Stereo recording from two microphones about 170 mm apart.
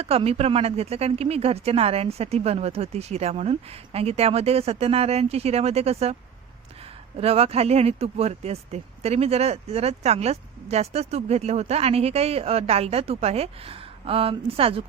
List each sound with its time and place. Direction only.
0.0 s speech: 35° right (ahead or behind)
7.2 s speech: 35° right (ahead or behind)